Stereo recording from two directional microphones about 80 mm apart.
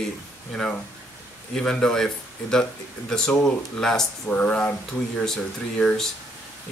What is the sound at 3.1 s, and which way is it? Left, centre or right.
Speech, centre.